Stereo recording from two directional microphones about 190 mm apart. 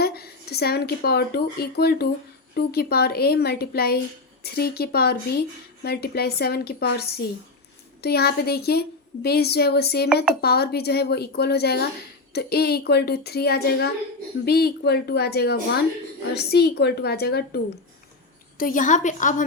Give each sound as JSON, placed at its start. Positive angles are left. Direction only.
{"t": 0.0, "sound": "speech", "side_deg": 55}
{"t": 18.5, "sound": "a woman's voice", "side_deg": 45}